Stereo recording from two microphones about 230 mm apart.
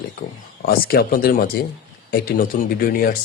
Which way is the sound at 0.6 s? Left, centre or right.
Left.